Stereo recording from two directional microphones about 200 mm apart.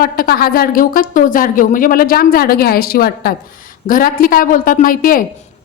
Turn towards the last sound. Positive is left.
turn(degrees=45)  # may be behind; listen again after turning